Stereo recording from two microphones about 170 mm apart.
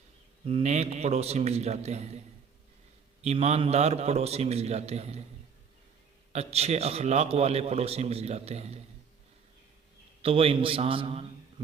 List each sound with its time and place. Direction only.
0.4 s a man's voice: 40° right (ahead or behind)
3.2 s a man's voice: 40° right (ahead or behind)
6.3 s a man's voice: 40° right (ahead or behind)
10.2 s a man's voice: 35° right (ahead or behind)